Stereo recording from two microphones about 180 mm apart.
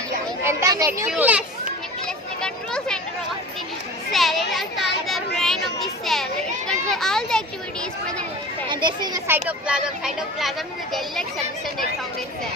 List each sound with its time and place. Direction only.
0.4 s speech: 20° right (ahead or behind)
1.1 s speech: 5° right (ahead or behind)
4.1 s a child's voice: centre (ahead or behind)
8.7 s speech: 25° right (ahead or behind); by 10.5 s 5° right (ahead or behind)